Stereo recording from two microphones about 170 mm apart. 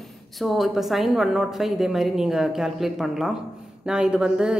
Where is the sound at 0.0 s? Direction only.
Centre (ahead or behind).